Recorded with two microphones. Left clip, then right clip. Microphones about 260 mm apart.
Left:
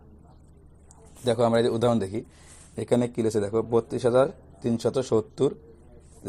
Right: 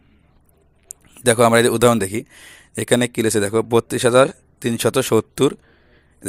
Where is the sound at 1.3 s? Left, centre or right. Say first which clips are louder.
Right 9 dB; right.